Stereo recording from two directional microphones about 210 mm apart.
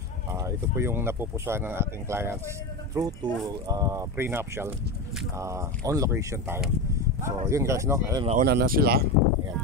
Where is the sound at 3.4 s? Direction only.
15° right (ahead or behind).